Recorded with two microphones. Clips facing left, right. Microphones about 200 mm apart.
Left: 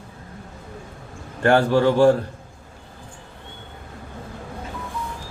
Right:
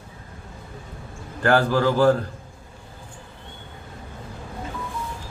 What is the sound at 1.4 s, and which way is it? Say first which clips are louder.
Mantra: left 2 dB; 25° left (ahead or behind).